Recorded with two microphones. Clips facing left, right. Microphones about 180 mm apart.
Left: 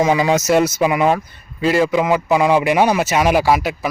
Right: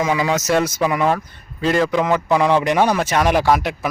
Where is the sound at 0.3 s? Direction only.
10° left (ahead or behind).